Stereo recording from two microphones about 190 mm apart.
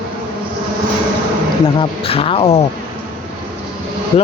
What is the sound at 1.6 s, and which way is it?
Speech, 25° left (ahead or behind).